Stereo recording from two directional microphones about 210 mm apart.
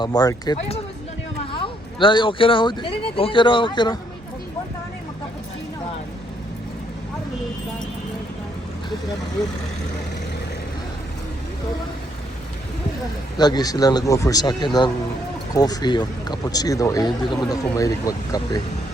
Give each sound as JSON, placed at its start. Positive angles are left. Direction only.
{"t": 0.0, "sound": "speech", "side_deg": 20}
{"t": 13.3, "sound": "speech", "side_deg": 20}